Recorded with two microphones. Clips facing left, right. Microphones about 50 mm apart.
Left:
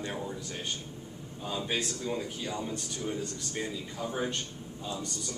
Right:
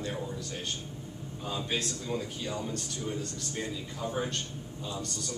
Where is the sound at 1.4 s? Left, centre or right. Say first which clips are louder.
Left 1 dB; centre.